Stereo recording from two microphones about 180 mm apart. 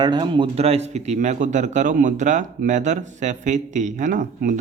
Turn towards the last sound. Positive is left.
turn(degrees=-45)  # may be behind; listen again after turning